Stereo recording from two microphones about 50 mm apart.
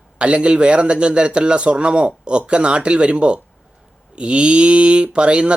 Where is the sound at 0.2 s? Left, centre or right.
Right.